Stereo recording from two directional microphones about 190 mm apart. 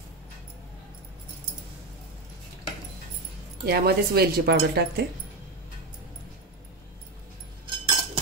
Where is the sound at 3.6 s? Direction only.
55° right (ahead or behind).